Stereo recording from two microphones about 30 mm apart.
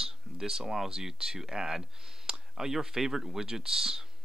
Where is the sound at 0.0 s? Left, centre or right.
Centre.